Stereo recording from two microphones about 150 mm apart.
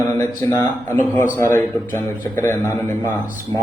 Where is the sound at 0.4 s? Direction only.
20° left (ahead or behind).